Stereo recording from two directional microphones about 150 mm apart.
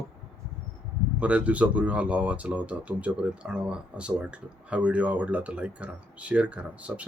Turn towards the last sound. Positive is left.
turn(degrees=-10)  # may be behind; listen again after turning